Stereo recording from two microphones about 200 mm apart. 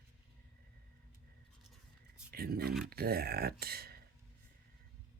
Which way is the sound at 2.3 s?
50° right (ahead or behind).